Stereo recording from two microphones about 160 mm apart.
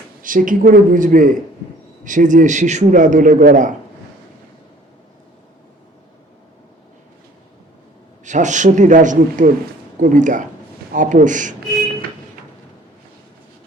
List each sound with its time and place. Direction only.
0.2 s a man's voice: 55° right (ahead or behind)
8.2 s a man's voice: 50° right (ahead or behind)